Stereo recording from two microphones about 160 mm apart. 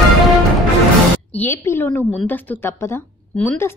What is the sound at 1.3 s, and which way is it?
A woman's voice, 10° left (ahead or behind).